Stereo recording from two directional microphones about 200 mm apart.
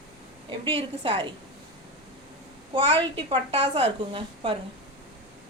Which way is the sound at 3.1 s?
25° right (ahead or behind).